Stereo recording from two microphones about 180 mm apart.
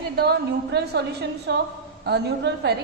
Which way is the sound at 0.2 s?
65° right (ahead or behind).